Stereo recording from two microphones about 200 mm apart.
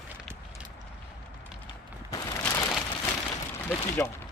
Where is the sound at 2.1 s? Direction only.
15° left (ahead or behind).